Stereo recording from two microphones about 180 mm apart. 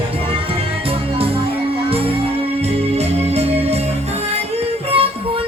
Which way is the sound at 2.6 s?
35° right (ahead or behind).